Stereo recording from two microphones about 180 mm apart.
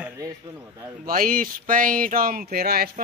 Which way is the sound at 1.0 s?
50° right (ahead or behind).